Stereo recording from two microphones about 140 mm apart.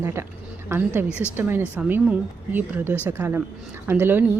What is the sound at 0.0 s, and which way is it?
A woman's voice, 20° right (ahead or behind).